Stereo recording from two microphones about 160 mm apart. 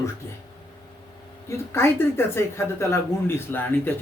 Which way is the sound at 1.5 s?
15° left (ahead or behind).